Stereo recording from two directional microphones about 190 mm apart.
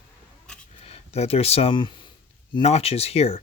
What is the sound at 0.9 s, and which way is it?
Speech, 35° left (ahead or behind).